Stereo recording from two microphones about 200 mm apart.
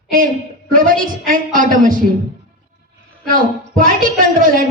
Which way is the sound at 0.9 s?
45° right (ahead or behind).